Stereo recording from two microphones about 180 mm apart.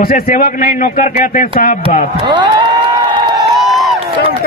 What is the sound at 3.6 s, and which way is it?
Crowd, centre (ahead or behind).